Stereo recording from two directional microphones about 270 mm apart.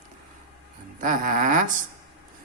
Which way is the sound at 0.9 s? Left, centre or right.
Right.